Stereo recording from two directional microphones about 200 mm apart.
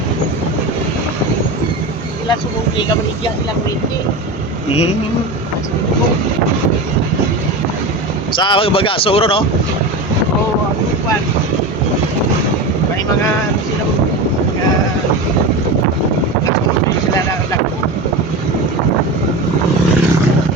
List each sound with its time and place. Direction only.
8.4 s speech: 25° left (ahead or behind)